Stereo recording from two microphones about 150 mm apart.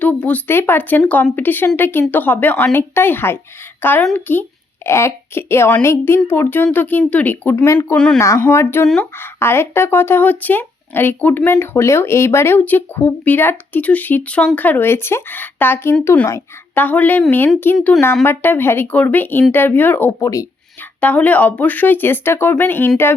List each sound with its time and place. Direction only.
0.0 s a woman's voice: 10° left (ahead or behind)
7.9 s speech: 5° left (ahead or behind)
8.2 s speech: 20° left (ahead or behind)
17.7 s speech: centre (ahead or behind)
18.3 s speech: 15° left (ahead or behind)
21.0 s speech: 10° left (ahead or behind)